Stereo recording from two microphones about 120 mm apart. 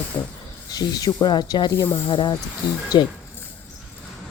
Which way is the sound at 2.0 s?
40° left (ahead or behind).